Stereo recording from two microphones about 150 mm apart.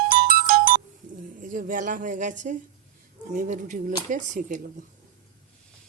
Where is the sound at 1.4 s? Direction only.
65° right (ahead or behind).